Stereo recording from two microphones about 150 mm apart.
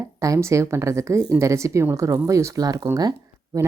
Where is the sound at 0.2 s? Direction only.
20° right (ahead or behind).